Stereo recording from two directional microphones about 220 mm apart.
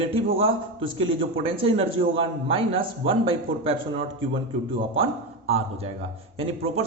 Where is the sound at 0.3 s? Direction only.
25° right (ahead or behind).